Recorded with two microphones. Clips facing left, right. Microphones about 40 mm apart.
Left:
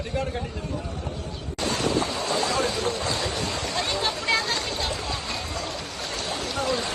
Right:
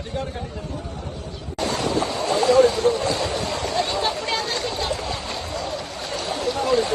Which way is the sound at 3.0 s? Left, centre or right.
Right.